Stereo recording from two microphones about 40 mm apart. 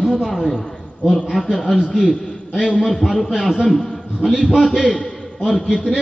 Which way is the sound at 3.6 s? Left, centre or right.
Centre.